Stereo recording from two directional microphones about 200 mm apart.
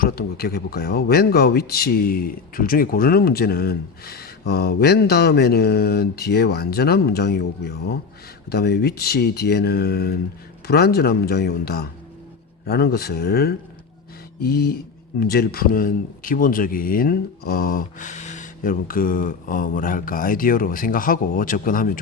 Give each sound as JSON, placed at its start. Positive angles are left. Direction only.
{"t": 0.0, "sound": "speech", "side_deg": 50}